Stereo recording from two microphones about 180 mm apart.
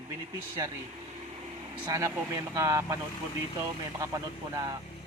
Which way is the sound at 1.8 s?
15° right (ahead or behind).